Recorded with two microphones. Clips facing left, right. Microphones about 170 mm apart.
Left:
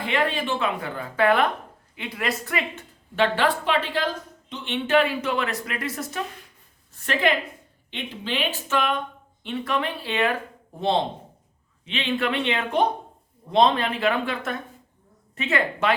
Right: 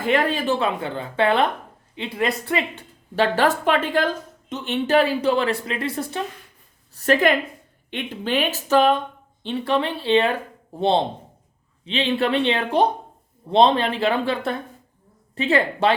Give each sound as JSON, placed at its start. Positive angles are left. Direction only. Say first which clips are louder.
{"t": 0.0, "sound": "a woman's voice", "louder": "right 4 dB", "side_deg": -45}
{"t": 0.8, "sound": "a woman's voice", "louder": "right 2 dB", "side_deg": -25}
{"t": 6.9, "sound": "a woman's voice", "louder": "right 5 dB", "side_deg": -40}